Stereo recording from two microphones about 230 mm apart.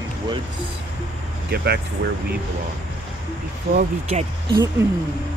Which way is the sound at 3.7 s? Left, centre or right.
Right.